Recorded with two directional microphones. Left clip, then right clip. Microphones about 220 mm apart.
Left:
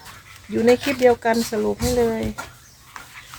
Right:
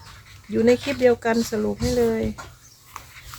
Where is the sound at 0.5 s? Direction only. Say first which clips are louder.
Left 2 dB; 5° right (ahead or behind).